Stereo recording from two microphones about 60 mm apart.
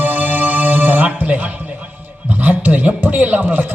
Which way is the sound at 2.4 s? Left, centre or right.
Right.